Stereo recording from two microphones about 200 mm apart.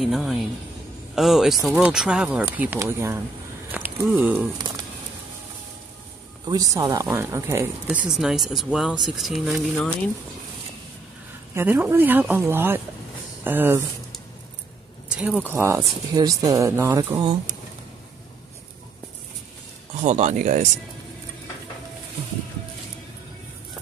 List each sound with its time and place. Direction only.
0.0 s speech: centre (ahead or behind)
6.4 s speech: 20° right (ahead or behind); by 10.1 s centre (ahead or behind)
11.5 s speech: 10° right (ahead or behind)
15.0 s a sound: 5° right (ahead or behind)
15.4 s speech: 10° right (ahead or behind)
20.0 s speech: 35° right (ahead or behind)